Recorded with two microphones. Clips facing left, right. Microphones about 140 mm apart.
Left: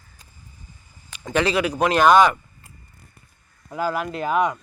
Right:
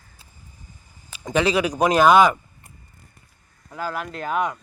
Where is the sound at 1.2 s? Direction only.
10° right (ahead or behind).